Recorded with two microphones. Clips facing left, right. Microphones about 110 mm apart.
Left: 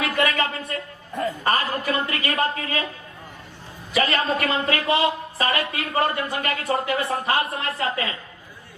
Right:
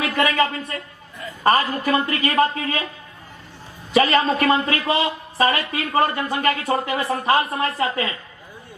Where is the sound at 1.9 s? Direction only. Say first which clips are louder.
Right 7 dB; 35° right (ahead or behind).